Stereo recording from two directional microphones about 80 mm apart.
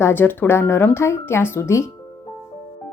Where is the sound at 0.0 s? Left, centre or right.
Left.